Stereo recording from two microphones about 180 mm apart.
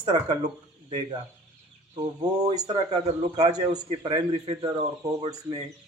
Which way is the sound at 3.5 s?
25° right (ahead or behind).